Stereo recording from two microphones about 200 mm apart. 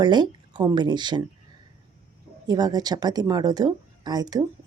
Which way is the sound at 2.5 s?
20° right (ahead or behind).